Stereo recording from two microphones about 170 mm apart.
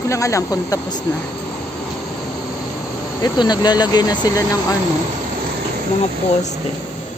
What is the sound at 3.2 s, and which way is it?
Speech, 25° left (ahead or behind).